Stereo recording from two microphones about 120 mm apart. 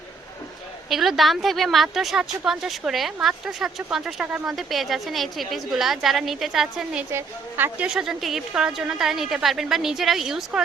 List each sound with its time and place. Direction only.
0.9 s a woman's voice: centre (ahead or behind)
7.1 s a woman's voice: 20° right (ahead or behind)
7.9 s a woman's voice: 5° right (ahead or behind)